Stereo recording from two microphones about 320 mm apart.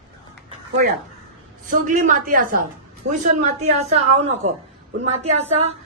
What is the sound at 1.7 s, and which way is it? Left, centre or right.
A woman's voice, right.